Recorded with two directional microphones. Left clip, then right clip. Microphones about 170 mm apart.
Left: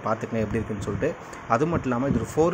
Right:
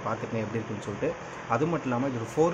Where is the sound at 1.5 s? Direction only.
30° left (ahead or behind).